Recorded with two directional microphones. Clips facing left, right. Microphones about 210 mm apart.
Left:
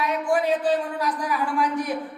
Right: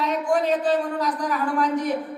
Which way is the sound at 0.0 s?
10° left (ahead or behind).